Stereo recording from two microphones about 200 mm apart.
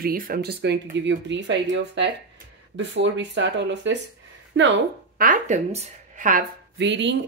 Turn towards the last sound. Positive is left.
turn(degrees=-60)  # may be behind; listen again after turning